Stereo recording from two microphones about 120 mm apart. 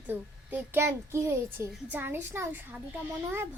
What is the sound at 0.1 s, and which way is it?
A child's voice, 15° right (ahead or behind).